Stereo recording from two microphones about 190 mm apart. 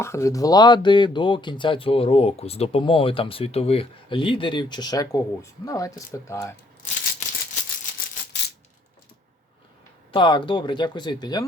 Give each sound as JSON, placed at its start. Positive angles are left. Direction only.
{"t": 0.0, "sound": "speech", "side_deg": 15}
{"t": 10.1, "sound": "speech", "side_deg": 25}